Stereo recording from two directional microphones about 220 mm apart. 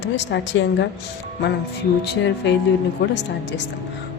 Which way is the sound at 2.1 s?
55° left (ahead or behind).